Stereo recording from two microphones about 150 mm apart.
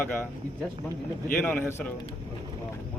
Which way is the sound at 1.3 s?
10° left (ahead or behind).